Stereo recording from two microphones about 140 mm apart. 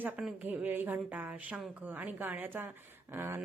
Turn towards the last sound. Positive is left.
turn(degrees=-15)  # may be behind; listen again after turning